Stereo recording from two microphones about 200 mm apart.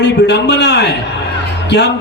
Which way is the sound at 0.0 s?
60° left (ahead or behind).